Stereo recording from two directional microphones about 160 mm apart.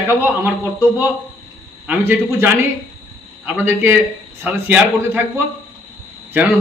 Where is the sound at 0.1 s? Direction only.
15° right (ahead or behind).